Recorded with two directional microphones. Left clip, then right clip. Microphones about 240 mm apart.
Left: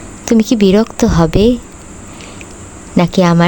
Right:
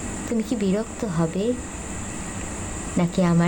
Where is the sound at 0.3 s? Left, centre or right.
Left.